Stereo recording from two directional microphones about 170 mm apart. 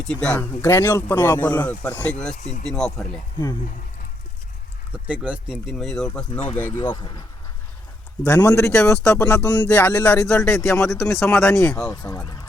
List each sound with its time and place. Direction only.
0.0 s speech: 5° left (ahead or behind)
2.3 s speech: 45° left (ahead or behind)
2.6 s speech: 5° left (ahead or behind)
4.9 s speech: 10° right (ahead or behind); by 6.9 s 10° left (ahead or behind)
6.9 s speech: 25° left (ahead or behind)
8.2 s speech: 15° left (ahead or behind)
11.9 s speech: 20° left (ahead or behind)